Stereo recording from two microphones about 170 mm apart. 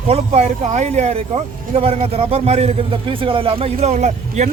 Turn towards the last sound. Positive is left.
turn(degrees=-45)  # may be behind; listen again after turning